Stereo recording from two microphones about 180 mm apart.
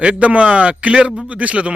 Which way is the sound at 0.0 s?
5° right (ahead or behind).